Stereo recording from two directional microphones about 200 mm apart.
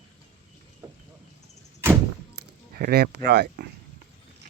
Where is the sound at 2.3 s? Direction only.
50° right (ahead or behind).